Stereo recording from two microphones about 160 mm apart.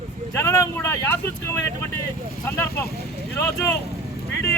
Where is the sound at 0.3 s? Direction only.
20° left (ahead or behind).